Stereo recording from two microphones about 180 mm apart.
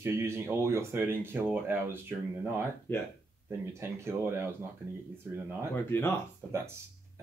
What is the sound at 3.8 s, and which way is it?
Speech, 15° right (ahead or behind).